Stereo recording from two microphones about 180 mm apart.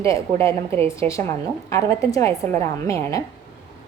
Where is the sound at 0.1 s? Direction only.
15° left (ahead or behind).